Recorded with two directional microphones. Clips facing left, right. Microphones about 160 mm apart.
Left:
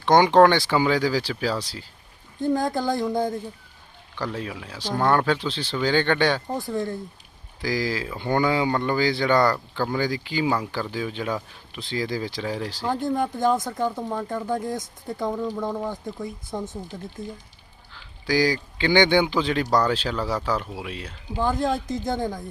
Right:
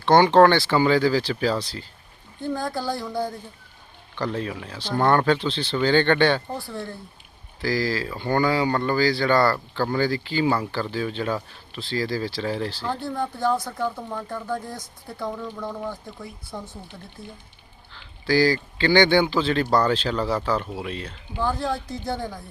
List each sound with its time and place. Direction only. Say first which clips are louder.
0.0 s speech: right 1 dB; 15° left (ahead or behind)
4.2 s speech: right 3 dB; 5° left (ahead or behind)
17.9 s speech: right 2 dB; 15° left (ahead or behind)
21.3 s speech: left 2 dB; 20° left (ahead or behind)